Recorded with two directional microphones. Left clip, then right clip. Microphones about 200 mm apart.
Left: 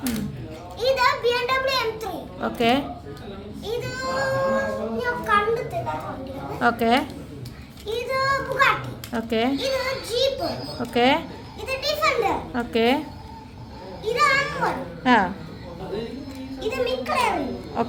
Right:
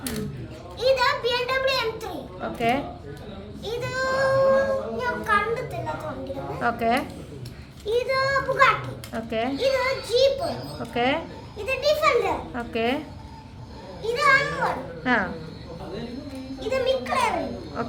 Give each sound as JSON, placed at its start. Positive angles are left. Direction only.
{"t": 0.8, "sound": "children playing", "side_deg": 0}
{"t": 2.4, "sound": "a woman's voice", "side_deg": 30}
{"t": 3.6, "sound": "child singing", "side_deg": -15}
{"t": 6.6, "sound": "speech", "side_deg": 25}
{"t": 7.9, "sound": "a child's voice", "side_deg": 5}
{"t": 9.1, "sound": "speech", "side_deg": 25}
{"t": 9.6, "sound": "a child's voice", "side_deg": 0}
{"t": 10.4, "sound": "speech", "side_deg": 25}
{"t": 11.6, "sound": "children playing", "side_deg": 0}
{"t": 12.5, "sound": "speech", "side_deg": 25}
{"t": 14.0, "sound": "children playing", "side_deg": -10}
{"t": 15.0, "sound": "speech", "side_deg": 25}
{"t": 16.6, "sound": "a child's voice", "side_deg": 0}